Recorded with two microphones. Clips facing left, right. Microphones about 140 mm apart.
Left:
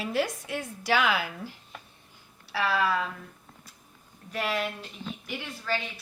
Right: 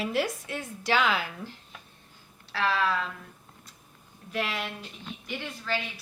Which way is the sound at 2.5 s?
10° left (ahead or behind).